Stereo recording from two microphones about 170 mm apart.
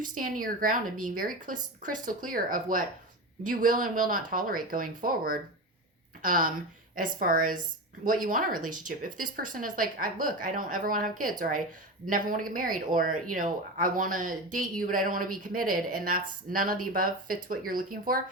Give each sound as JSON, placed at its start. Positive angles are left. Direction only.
{"t": 0.1, "sound": "speech", "side_deg": -55}